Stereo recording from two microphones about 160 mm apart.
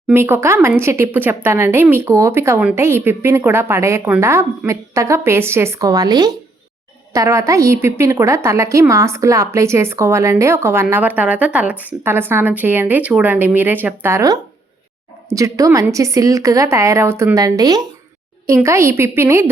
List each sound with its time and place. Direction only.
0.1 s a woman's voice: 15° right (ahead or behind)